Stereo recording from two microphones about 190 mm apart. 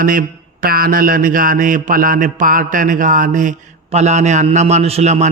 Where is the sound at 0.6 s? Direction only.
50° right (ahead or behind).